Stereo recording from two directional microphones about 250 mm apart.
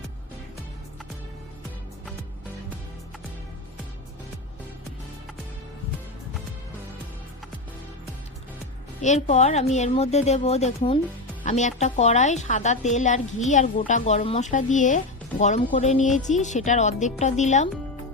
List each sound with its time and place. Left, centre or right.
9.0 s a woman's voice: left